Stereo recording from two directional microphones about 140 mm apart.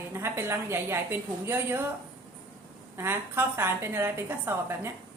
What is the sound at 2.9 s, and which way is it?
A woman's voice, 15° right (ahead or behind).